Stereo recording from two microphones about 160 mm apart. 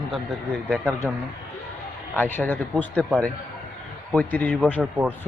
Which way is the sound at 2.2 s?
10° left (ahead or behind).